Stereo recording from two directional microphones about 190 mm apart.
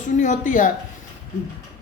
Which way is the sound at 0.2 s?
40° left (ahead or behind).